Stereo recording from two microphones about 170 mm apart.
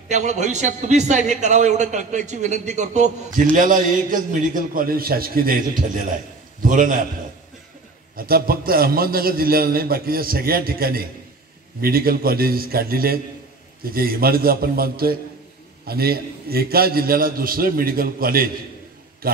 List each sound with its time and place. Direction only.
0.1 s a man's voice: 45° right (ahead or behind)
3.5 s a man's voice: 55° right (ahead or behind)
8.2 s a man's voice: 60° right (ahead or behind)